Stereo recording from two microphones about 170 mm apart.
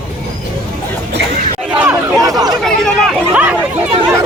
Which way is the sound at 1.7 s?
10° right (ahead or behind).